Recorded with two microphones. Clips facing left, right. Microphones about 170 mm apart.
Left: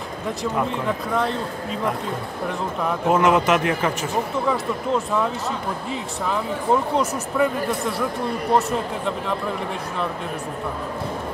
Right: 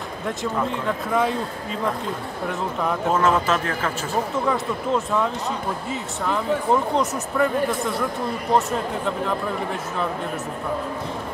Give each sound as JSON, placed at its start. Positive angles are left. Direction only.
{"t": 0.7, "sound": "speech", "side_deg": -5}
{"t": 3.1, "sound": "speech", "side_deg": 15}
{"t": 4.5, "sound": "speech", "side_deg": 0}